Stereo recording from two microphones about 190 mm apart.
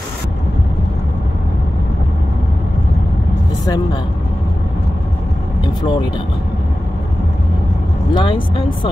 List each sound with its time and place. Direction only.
3.6 s speech: 20° left (ahead or behind)
5.8 s speech: 25° left (ahead or behind)
8.1 s speech: 25° left (ahead or behind)